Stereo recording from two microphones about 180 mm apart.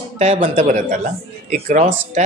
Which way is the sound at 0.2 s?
40° right (ahead or behind).